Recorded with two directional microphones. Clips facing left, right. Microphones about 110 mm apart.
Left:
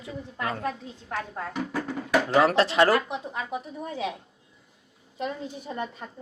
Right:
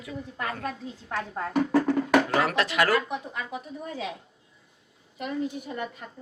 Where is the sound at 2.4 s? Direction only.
30° left (ahead or behind).